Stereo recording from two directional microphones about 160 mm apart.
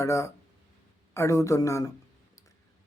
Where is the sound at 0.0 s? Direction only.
20° left (ahead or behind).